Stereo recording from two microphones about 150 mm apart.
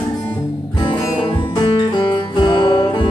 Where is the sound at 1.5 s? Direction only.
30° left (ahead or behind).